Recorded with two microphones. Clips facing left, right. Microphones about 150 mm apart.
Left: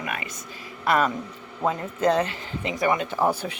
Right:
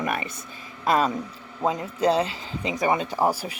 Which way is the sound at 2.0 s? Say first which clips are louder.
Even; 30° right (ahead or behind).